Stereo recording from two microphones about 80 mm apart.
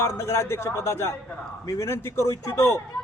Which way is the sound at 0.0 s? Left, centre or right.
Left.